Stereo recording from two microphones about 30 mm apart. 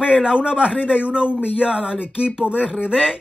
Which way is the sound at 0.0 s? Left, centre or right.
Right.